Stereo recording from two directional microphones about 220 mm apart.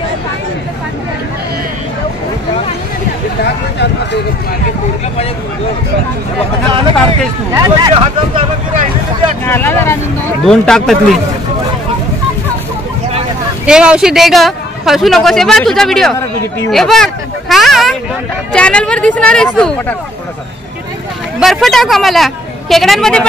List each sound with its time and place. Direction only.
7.5 s speech: 20° right (ahead or behind)
9.5 s a man's voice: 10° left (ahead or behind)
13.7 s a man's voice: 5° right (ahead or behind)
16.7 s a sound: centre (ahead or behind)
18.5 s a man's voice: 5° left (ahead or behind)
21.4 s a man's voice: centre (ahead or behind)